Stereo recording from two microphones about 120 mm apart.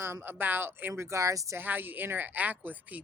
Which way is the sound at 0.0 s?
20° right (ahead or behind).